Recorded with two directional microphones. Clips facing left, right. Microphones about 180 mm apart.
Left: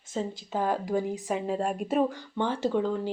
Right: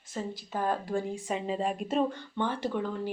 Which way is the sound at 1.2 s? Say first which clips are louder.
Left 2 dB; centre (ahead or behind).